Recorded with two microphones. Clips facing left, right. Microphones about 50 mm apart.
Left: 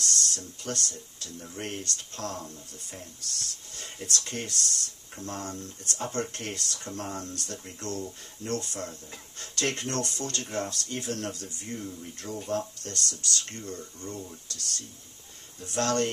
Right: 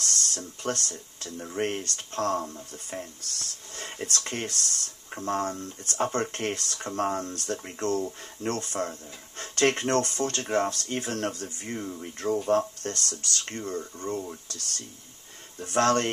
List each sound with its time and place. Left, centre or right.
0.2 s speech: right
15.6 s speech: right